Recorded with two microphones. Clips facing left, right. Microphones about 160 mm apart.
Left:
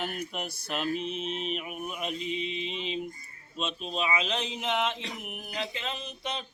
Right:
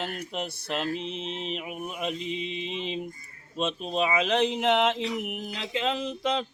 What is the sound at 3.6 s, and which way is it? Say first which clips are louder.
Speech: right 5 dB; 50° right (ahead or behind).